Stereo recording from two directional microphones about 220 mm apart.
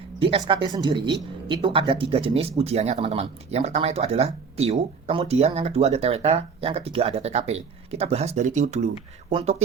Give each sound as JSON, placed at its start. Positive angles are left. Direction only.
{"t": 0.2, "sound": "speech", "side_deg": -25}